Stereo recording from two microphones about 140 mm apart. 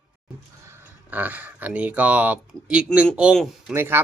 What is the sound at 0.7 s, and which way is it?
Speech, 10° right (ahead or behind).